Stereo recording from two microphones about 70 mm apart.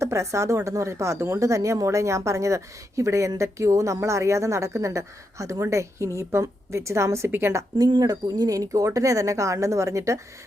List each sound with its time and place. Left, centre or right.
0.0 s a woman's voice: right
7.3 s a woman's voice: right
7.8 s speech: right